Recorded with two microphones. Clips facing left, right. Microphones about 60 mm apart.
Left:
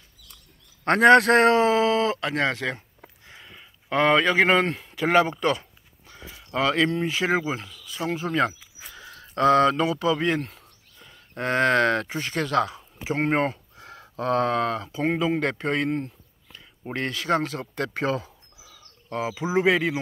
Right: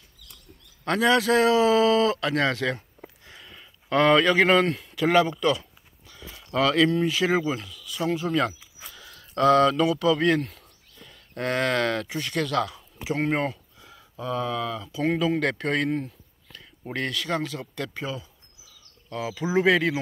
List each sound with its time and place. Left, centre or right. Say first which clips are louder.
0.8 s a man's voice: left 6 dB; left
1.7 s speech: right 1 dB; left
3.3 s a sound: even; centre
6.5 s speech: right 2 dB; left
13.7 s speech: left 6 dB; left
15.0 s speech: right 1 dB; left
18.0 s a sound: left 7 dB; left
19.0 s speech: left 3 dB; left
19.4 s speech: right 1 dB; centre